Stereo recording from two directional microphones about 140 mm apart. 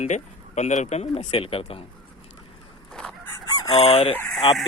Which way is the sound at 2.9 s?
10° left (ahead or behind).